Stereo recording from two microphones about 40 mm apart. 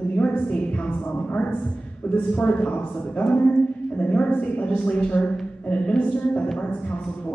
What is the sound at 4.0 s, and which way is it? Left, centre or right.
Speech, left.